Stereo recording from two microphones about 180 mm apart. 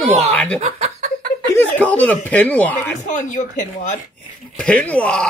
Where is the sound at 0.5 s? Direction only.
35° right (ahead or behind).